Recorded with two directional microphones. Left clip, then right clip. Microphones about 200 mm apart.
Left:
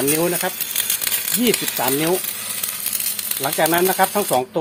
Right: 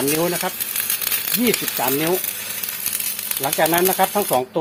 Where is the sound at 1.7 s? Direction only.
10° left (ahead or behind).